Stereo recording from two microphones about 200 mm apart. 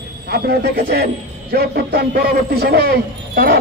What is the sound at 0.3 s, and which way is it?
A man's voice, 55° right (ahead or behind).